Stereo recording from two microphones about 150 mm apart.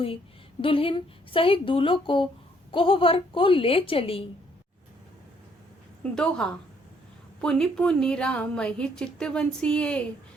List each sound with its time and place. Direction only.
0.6 s speech: 35° left (ahead or behind)
6.0 s a woman's voice: 5° left (ahead or behind)